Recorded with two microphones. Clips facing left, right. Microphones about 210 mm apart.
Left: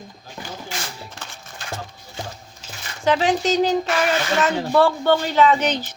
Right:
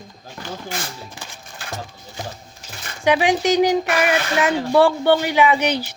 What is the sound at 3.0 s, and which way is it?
Speech, 15° right (ahead or behind).